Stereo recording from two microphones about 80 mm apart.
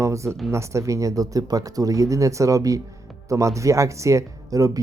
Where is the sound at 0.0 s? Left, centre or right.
Right.